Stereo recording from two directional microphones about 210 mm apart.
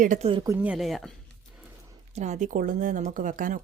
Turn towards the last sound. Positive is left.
turn(degrees=-40)  # may be behind; listen again after turning